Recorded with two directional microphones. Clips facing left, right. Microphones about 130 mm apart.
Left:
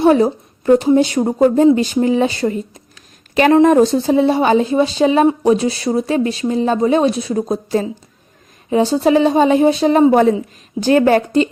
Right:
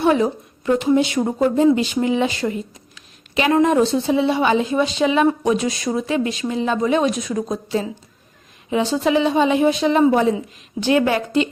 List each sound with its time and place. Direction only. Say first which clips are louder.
0.0 s speech: left 5 dB; 35° left (ahead or behind)
10.1 s a woman's voice: left 5 dB; 50° left (ahead or behind)
10.8 s speech: left 5 dB; 40° left (ahead or behind)